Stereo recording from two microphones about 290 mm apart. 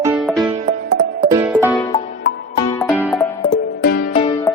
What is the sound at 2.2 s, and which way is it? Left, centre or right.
Music, left.